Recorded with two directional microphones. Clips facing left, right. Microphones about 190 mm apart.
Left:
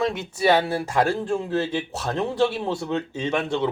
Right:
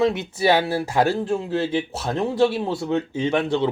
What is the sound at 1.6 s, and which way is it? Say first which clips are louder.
Speech: right 3 dB; 20° right (ahead or behind).